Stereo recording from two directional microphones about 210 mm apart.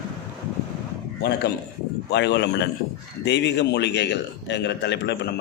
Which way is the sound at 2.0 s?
55° left (ahead or behind).